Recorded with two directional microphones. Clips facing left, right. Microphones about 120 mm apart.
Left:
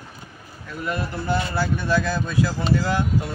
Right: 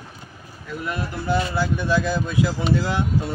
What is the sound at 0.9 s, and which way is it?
Speech, 15° right (ahead or behind).